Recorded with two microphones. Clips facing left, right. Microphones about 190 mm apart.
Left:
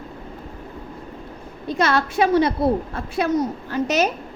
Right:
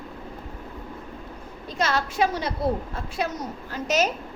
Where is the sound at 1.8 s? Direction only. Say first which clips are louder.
Left 4 dB; 65° left (ahead or behind).